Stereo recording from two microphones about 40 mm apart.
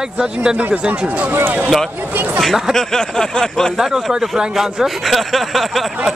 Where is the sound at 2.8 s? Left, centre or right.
Centre.